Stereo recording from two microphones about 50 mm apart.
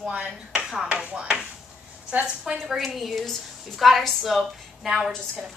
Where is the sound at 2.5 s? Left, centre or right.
Centre.